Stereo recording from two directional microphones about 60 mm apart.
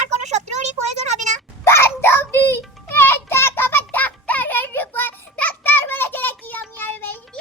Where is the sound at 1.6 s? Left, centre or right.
Left.